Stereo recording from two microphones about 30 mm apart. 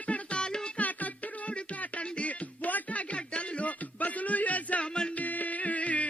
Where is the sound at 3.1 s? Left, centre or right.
Left.